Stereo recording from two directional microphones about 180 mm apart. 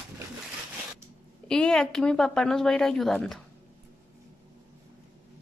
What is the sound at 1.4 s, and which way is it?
Speech, 5° left (ahead or behind).